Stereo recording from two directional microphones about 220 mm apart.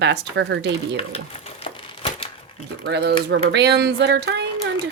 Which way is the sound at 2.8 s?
50° right (ahead or behind).